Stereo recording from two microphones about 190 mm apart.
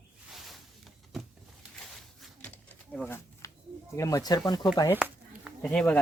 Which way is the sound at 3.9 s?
15° left (ahead or behind).